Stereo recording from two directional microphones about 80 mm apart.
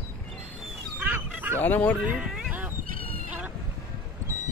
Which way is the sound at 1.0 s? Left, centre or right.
Right.